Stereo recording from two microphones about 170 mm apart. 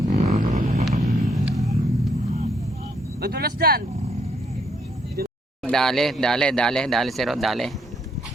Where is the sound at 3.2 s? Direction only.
70° right (ahead or behind).